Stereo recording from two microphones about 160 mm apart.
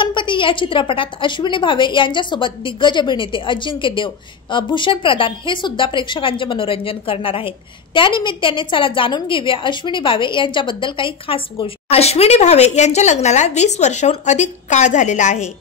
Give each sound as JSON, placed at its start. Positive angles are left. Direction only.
{"t": 0.0, "sound": "a woman's voice", "side_deg": 30}